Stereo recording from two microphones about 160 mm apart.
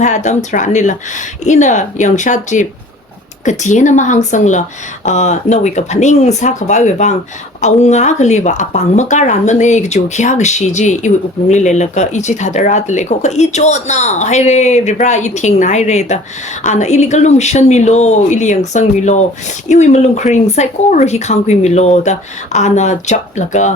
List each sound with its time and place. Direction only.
0.0 s a woman's voice: 50° left (ahead or behind)